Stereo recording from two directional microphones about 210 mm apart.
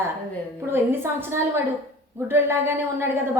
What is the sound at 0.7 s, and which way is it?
A woman's voice, 10° right (ahead or behind).